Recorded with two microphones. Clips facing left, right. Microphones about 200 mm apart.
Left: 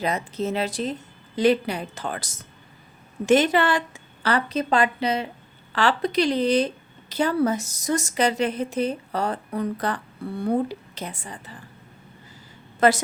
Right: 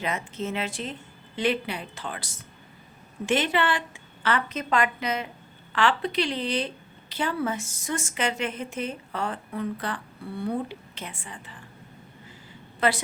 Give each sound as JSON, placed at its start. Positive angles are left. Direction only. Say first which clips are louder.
{"t": 0.0, "sound": "a woman's voice", "louder": "left 5 dB", "side_deg": 35}
{"t": 12.8, "sound": "a woman's voice", "louder": "left 6 dB", "side_deg": 45}